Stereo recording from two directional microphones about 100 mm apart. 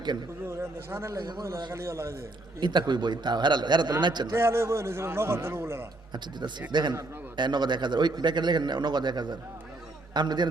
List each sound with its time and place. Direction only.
0.4 s a man's voice: 25° right (ahead or behind)
1.2 s a man's voice: 40° right (ahead or behind)
2.6 s speech: 50° right (ahead or behind)
4.4 s a man's voice: 25° right (ahead or behind)
6.7 s speech: 50° right (ahead or behind)